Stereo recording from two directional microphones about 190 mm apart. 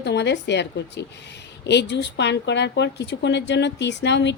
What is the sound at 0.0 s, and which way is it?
A woman's voice, 65° left (ahead or behind).